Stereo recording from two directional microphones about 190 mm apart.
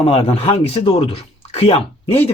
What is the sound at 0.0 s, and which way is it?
Speech, 30° left (ahead or behind).